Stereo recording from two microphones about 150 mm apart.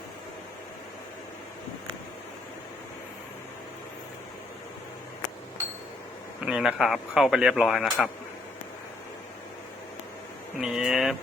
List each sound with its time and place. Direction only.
6.4 s speech: 5° right (ahead or behind)
10.6 s speech: 5° right (ahead or behind)